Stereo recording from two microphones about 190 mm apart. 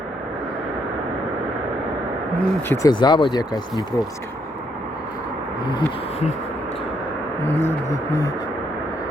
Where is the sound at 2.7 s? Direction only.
20° left (ahead or behind).